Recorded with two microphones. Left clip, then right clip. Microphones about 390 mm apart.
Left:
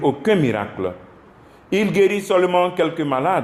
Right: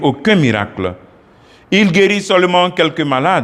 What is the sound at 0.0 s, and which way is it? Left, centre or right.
A man's voice, right.